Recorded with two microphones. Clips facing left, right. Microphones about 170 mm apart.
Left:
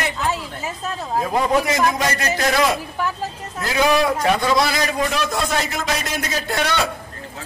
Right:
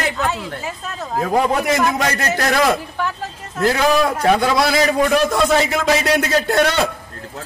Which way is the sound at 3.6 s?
60° right (ahead or behind).